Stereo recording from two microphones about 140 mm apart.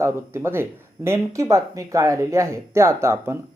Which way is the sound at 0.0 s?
15° right (ahead or behind).